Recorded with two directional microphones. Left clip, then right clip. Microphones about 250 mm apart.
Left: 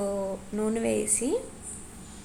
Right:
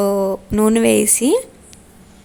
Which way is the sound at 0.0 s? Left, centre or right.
Right.